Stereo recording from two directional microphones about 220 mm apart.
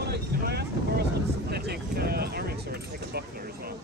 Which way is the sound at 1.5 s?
45° right (ahead or behind).